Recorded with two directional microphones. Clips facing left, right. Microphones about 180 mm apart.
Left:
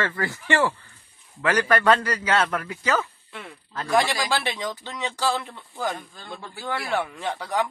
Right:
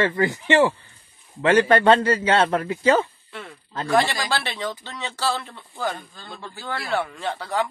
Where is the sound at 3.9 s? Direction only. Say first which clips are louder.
Right 1 dB; 10° left (ahead or behind).